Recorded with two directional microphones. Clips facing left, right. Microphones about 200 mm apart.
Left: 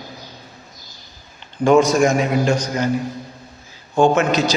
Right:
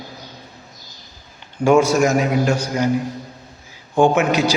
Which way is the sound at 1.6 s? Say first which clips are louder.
Left 1 dB; 10° right (ahead or behind).